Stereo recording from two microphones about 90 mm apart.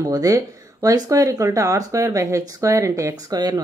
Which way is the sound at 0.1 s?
40° right (ahead or behind).